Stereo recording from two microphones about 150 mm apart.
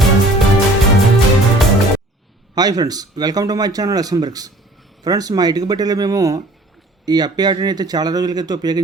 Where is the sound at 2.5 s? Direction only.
25° right (ahead or behind).